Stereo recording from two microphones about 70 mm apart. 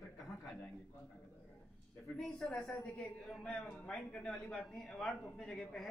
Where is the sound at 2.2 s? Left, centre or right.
Centre.